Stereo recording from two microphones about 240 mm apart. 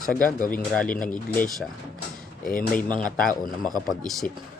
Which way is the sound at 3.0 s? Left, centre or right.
Left.